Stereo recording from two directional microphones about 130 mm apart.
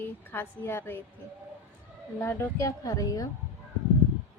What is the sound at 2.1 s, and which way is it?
Speech, 15° left (ahead or behind).